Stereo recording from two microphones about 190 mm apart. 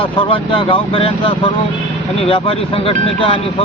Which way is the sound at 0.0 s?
30° left (ahead or behind).